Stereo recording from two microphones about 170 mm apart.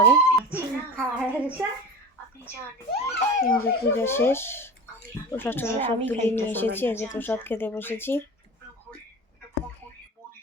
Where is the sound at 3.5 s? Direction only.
15° left (ahead or behind).